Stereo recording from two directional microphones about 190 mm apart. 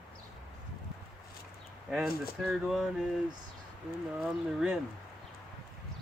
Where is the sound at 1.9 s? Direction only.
Centre (ahead or behind).